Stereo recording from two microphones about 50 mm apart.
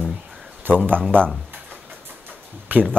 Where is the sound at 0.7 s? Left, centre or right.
Right.